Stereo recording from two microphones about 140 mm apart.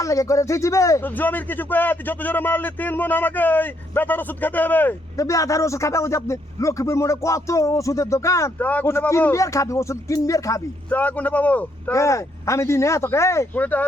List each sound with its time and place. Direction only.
0.0 s speech: 20° left (ahead or behind)
10.8 s speech: 10° left (ahead or behind)
11.9 s speech: 20° left (ahead or behind)